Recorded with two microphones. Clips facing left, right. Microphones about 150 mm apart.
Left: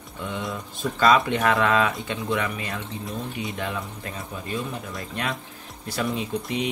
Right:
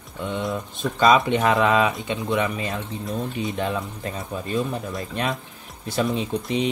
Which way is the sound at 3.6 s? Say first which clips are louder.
Right 4 dB; 25° right (ahead or behind).